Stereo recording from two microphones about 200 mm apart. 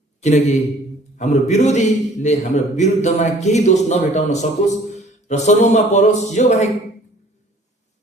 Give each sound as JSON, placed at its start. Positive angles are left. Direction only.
{"t": 0.2, "sound": "a man's voice", "side_deg": 35}